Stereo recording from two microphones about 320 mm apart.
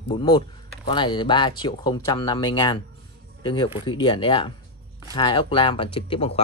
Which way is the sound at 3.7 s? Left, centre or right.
Centre.